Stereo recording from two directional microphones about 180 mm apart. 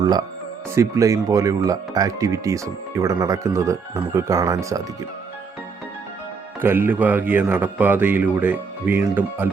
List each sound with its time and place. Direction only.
0.0 s speech: 20° right (ahead or behind)
6.6 s speech: 10° right (ahead or behind)